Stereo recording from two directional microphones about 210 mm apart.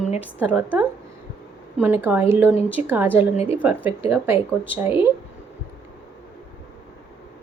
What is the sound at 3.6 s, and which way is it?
A woman's voice, 10° right (ahead or behind).